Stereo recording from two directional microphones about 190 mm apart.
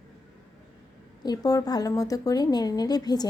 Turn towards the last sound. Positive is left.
turn(degrees=20)  # may be behind; listen again after turning